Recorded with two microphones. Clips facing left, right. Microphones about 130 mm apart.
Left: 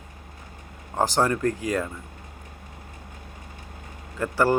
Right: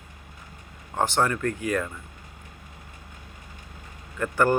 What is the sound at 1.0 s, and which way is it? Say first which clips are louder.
Speech: left 2 dB; 35° left (ahead or behind).